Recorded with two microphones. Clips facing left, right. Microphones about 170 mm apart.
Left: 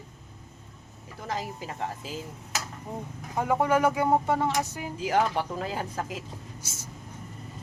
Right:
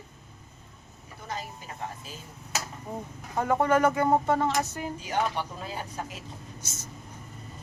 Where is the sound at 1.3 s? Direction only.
90° left.